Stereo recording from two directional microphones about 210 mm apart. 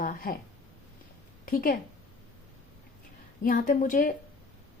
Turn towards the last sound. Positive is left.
turn(degrees=40)  # may be behind; listen again after turning